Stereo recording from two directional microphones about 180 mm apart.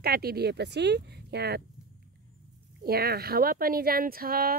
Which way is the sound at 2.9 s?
60° right (ahead or behind).